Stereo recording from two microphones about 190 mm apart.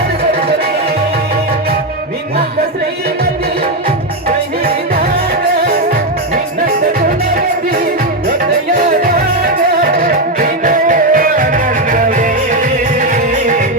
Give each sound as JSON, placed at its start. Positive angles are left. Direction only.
{"t": 0.2, "sound": "music", "side_deg": -55}
{"t": 5.3, "sound": "music", "side_deg": -55}